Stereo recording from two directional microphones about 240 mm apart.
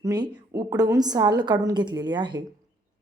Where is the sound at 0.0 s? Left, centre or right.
Centre.